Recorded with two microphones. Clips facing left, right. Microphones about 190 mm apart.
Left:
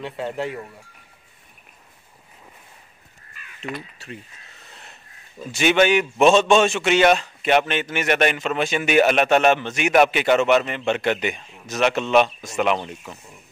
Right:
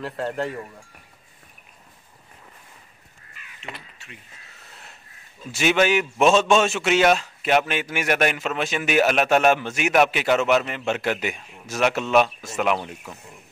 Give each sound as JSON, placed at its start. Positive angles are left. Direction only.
{"t": 0.0, "sound": "a man's voice", "side_deg": 0}
{"t": 3.6, "sound": "speech", "side_deg": 35}
{"t": 5.5, "sound": "a man's voice", "side_deg": -5}